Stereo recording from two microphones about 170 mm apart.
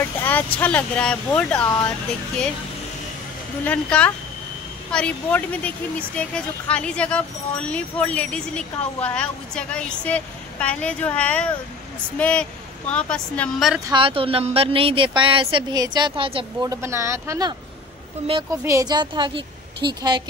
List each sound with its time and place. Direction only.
0.0 s vehicle: 10° left (ahead or behind)
0.6 s speech: 10° left (ahead or behind)
3.6 s a woman's voice: 10° left (ahead or behind)
13.8 s a woman's voice: 30° right (ahead or behind)
16.6 s speech: 15° right (ahead or behind)
18.6 s a woman's voice: 20° right (ahead or behind)